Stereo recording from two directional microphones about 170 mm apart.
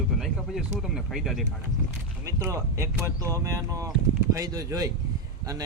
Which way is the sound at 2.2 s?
15° right (ahead or behind).